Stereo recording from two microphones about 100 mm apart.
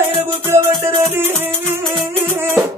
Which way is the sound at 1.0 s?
25° right (ahead or behind).